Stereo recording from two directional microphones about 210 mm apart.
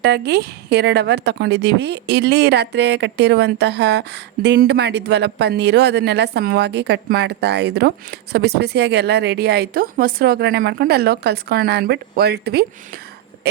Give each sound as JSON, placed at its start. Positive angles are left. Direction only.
{"t": 0.0, "sound": "speech", "side_deg": -50}